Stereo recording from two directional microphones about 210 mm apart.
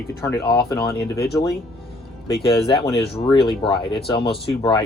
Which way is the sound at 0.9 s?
50° left (ahead or behind).